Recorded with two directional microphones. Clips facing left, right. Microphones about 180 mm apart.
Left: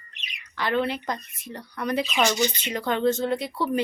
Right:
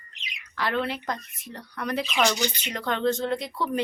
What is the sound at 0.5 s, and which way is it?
Speech, centre (ahead or behind).